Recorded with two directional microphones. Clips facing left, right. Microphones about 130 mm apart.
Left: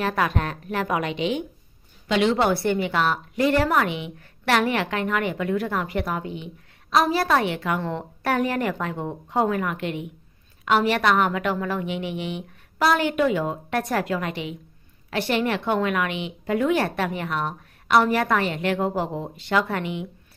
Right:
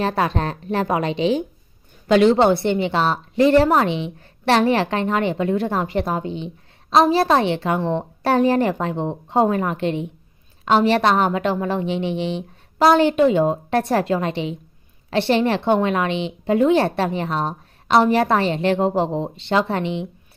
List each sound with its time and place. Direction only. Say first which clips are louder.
0.0 s a woman's voice: right 3 dB; 30° right (ahead or behind)
2.3 s a woman's voice: right 5 dB; 25° right (ahead or behind)